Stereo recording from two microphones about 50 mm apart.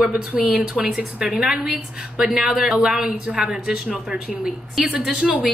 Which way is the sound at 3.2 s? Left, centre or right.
Right.